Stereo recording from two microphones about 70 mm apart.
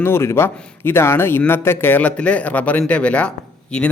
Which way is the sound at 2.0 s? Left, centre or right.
Centre.